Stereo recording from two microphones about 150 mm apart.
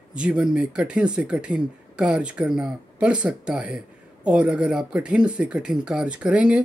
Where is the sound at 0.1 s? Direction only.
5° right (ahead or behind).